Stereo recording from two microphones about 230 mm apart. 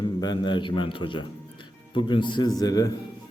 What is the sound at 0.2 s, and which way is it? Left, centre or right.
A man's voice, centre.